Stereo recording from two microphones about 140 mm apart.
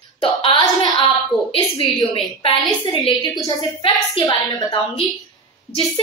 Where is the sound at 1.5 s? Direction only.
40° left (ahead or behind).